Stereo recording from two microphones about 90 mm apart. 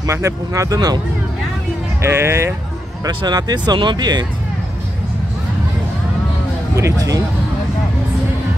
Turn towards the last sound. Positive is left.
turn(degrees=-40)  # may be behind; listen again after turning